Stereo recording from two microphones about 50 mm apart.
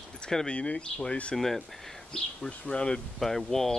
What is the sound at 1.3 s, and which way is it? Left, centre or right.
Speech, centre.